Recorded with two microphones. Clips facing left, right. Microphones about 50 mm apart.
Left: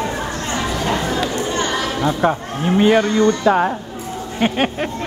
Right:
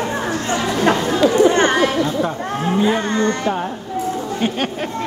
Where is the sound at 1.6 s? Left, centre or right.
Right.